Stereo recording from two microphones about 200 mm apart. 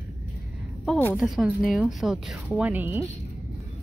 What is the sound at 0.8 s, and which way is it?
Speech, 10° left (ahead or behind).